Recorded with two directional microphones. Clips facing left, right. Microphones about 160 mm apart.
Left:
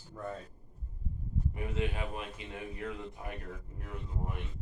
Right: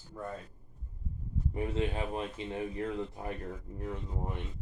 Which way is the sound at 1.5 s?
30° right (ahead or behind).